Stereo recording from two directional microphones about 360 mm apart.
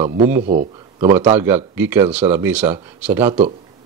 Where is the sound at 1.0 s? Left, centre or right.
Centre.